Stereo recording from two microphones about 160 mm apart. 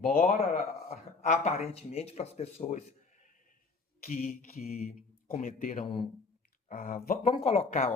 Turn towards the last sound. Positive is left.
turn(degrees=35)  # may be behind; listen again after turning